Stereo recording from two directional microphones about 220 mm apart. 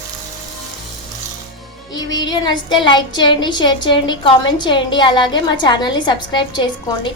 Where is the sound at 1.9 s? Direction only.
20° left (ahead or behind).